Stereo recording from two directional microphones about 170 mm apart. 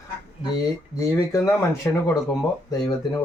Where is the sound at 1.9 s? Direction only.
15° left (ahead or behind).